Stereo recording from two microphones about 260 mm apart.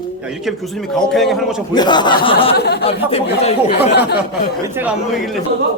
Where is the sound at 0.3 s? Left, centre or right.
Centre.